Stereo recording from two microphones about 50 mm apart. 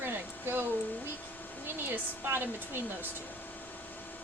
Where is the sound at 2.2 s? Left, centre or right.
Right.